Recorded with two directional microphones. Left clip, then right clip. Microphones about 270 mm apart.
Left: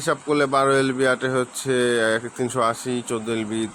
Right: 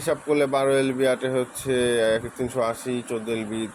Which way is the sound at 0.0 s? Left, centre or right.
Centre.